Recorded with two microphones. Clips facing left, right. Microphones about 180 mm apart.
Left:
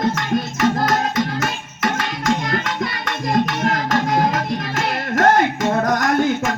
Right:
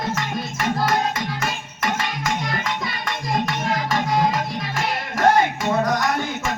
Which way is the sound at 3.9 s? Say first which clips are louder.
Left 1 dB; 50° left (ahead or behind).